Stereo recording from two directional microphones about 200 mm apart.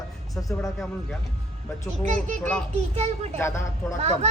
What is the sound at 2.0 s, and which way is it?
Speech, 40° right (ahead or behind).